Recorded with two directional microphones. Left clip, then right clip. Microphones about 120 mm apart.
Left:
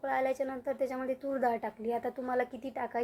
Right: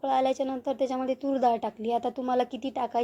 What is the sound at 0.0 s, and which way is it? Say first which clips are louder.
A woman's voice: right 6 dB; 20° right (ahead or behind).